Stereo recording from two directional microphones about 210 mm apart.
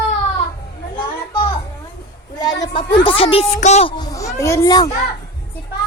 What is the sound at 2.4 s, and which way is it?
A woman's voice, 20° left (ahead or behind).